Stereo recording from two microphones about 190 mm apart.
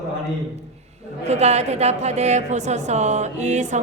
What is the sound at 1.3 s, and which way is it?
A woman's voice, 35° right (ahead or behind).